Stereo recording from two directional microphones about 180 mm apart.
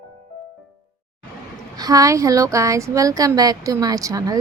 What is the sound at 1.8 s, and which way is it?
A woman's voice, 20° right (ahead or behind).